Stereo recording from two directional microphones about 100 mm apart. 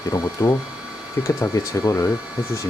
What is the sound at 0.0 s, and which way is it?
Speech, 35° left (ahead or behind).